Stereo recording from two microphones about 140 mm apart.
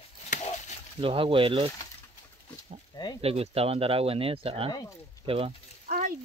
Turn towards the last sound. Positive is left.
turn(degrees=-75)  # may be behind; listen again after turning